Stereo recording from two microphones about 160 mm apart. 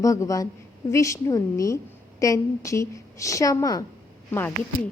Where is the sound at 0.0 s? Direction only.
20° left (ahead or behind).